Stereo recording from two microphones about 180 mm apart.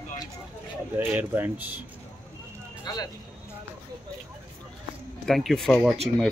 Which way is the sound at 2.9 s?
20° left (ahead or behind).